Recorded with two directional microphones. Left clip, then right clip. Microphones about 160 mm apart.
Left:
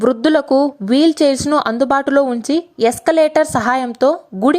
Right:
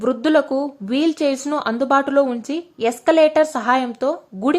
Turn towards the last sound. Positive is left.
turn(degrees=30)  # may be behind; listen again after turning